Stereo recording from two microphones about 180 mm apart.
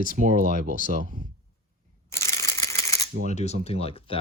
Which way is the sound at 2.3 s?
15° left (ahead or behind).